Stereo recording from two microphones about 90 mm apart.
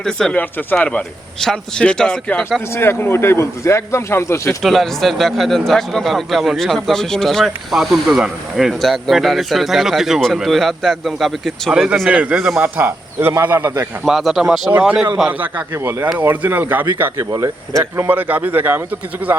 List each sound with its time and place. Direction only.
0.0 s speech: 5° left (ahead or behind)
0.3 s speech: 15° left (ahead or behind)
2.7 s speech: 25° left (ahead or behind)
4.6 s a man's voice: centre (ahead or behind)
12.5 s speech: 25° right (ahead or behind)
14.0 s speech: 5° right (ahead or behind)
14.7 s speech: 20° right (ahead or behind)
18.1 s speech: 20° right (ahead or behind)